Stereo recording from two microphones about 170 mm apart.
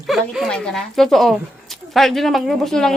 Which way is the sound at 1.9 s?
Centre (ahead or behind).